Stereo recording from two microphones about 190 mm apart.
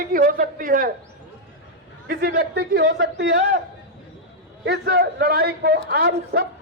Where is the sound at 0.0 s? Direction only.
45° right (ahead or behind).